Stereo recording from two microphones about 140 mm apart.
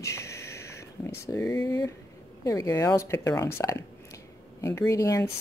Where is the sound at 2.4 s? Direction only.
25° left (ahead or behind).